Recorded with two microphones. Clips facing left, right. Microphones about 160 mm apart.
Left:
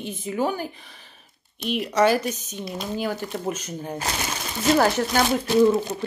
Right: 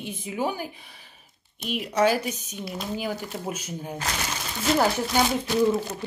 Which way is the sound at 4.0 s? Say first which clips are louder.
Left 1 dB; 25° left (ahead or behind).